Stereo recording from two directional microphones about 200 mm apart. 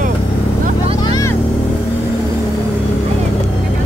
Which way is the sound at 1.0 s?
20° left (ahead or behind).